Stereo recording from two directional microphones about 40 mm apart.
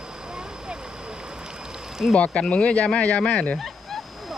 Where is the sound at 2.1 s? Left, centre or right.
Left.